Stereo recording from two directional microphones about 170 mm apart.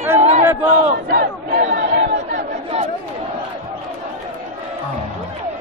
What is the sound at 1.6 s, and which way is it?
Chatter, 40° right (ahead or behind).